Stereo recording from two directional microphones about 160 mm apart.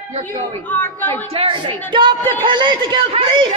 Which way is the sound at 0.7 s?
10° left (ahead or behind).